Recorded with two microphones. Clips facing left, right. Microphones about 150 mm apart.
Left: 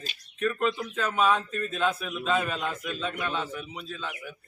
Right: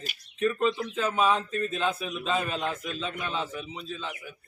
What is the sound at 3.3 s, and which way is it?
Speech, 25° right (ahead or behind).